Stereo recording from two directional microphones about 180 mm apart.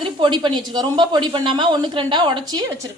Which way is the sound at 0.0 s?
25° right (ahead or behind).